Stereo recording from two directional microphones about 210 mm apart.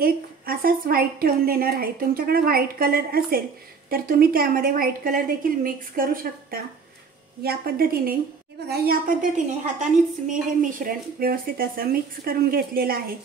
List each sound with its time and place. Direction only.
0.0 s a woman's voice: 45° right (ahead or behind)
7.4 s a woman's voice: 45° right (ahead or behind)